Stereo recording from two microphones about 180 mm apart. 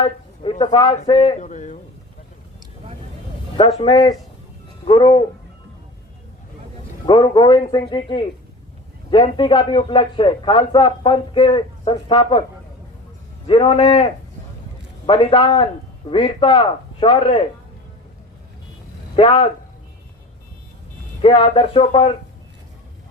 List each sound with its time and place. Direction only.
0.6 s a man's voice: 25° left (ahead or behind); by 1.8 s 40° left (ahead or behind)
3.8 s a man's voice: 25° left (ahead or behind)
7.0 s a man's voice: 25° left (ahead or behind)
13.5 s a man's voice: 30° left (ahead or behind)
19.1 s a man's voice: 30° left (ahead or behind)
21.2 s a man's voice: 30° left (ahead or behind)